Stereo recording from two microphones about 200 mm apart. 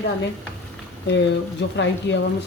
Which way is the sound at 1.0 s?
60° left (ahead or behind).